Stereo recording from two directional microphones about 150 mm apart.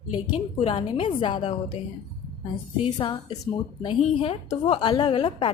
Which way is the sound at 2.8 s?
30° left (ahead or behind).